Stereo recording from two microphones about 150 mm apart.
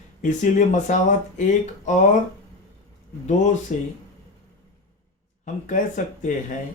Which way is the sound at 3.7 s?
60° left (ahead or behind).